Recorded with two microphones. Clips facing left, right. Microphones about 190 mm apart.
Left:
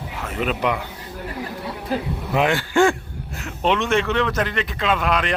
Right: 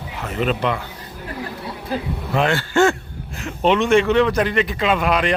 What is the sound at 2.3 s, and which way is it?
Speech, 15° left (ahead or behind).